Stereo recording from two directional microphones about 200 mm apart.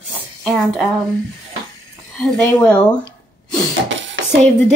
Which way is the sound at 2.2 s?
5° left (ahead or behind).